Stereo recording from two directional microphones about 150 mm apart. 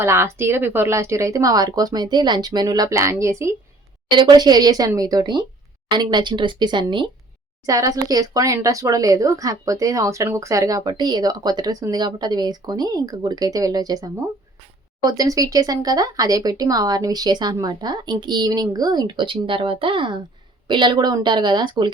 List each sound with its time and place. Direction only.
0.0 s speech: 15° right (ahead or behind)
4.1 s speech: 30° right (ahead or behind)